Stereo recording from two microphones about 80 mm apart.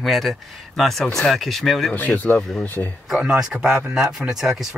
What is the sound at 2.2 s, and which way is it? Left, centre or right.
Speech, left.